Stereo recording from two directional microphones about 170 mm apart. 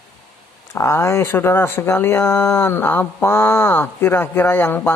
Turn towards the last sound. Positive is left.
turn(degrees=10)  # may be behind; listen again after turning